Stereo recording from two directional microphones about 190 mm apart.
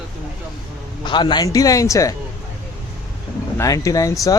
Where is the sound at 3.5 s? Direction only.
15° left (ahead or behind).